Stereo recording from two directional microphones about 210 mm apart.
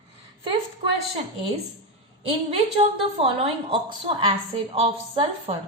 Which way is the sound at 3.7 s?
25° right (ahead or behind).